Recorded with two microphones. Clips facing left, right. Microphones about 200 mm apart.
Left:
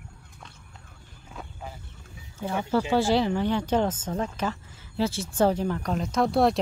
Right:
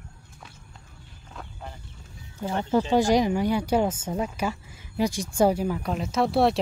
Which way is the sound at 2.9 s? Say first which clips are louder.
Right 2 dB; 15° right (ahead or behind).